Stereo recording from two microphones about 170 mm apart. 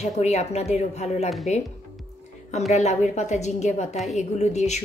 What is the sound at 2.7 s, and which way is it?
A woman's voice, 40° left (ahead or behind).